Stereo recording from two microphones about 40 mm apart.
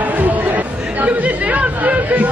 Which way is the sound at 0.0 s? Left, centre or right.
Right.